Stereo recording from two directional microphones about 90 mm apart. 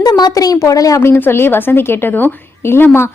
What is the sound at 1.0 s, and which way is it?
A woman's voice, 25° left (ahead or behind).